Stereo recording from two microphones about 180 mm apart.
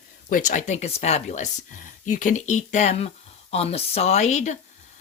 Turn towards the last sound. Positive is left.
turn(degrees=40)  # may be behind; listen again after turning